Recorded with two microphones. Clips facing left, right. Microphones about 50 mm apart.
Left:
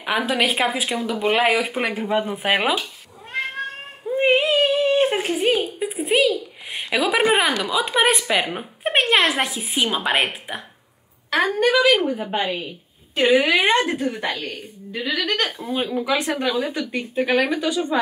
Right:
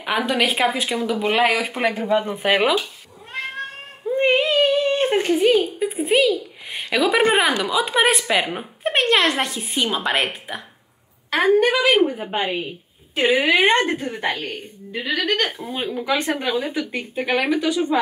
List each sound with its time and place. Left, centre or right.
0.0 s speech: centre
4.1 s speech: centre
11.3 s a woman's voice: centre
11.7 s a woman's voice: right
12.4 s a sound: right
13.2 s speech: centre
13.7 s a woman's voice: right
15.6 s speech: centre
16.4 s a woman's voice: centre